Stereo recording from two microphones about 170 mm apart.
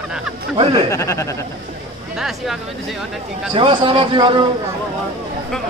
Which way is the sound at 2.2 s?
Centre (ahead or behind).